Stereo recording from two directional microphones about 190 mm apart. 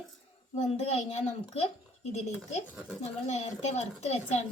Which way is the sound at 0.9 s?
35° left (ahead or behind).